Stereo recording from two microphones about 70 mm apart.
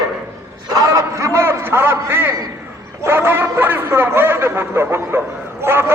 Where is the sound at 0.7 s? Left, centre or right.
Right.